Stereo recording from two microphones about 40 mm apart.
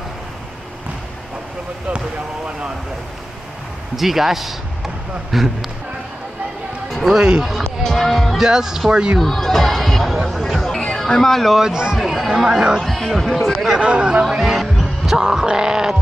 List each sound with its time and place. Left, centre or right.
3.9 s speech: centre
7.1 s speech: centre
7.8 s speech: centre
8.4 s speech: centre
9.2 s speech: centre
10.5 s music: centre
11.1 s speech: centre
11.6 s speech: centre
12.8 s speech: centre
13.7 s speech: right
14.3 s heart sounds: centre